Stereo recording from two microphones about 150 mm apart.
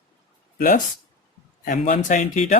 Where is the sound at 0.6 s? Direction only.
70° left (ahead or behind).